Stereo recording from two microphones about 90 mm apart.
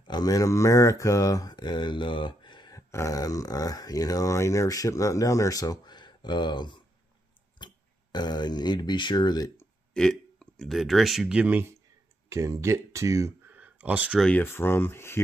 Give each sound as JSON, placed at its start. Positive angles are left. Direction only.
{"t": 0.0, "sound": "speech", "side_deg": 50}
{"t": 2.7, "sound": "speech", "side_deg": 35}
{"t": 9.9, "sound": "speech", "side_deg": 5}
{"t": 12.3, "sound": "speech", "side_deg": -35}
{"t": 13.5, "sound": "a sound", "side_deg": -15}
{"t": 14.4, "sound": "speech", "side_deg": 25}